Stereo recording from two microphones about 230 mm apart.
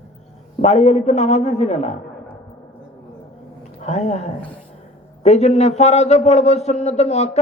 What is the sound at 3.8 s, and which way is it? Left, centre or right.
A man's voice, left.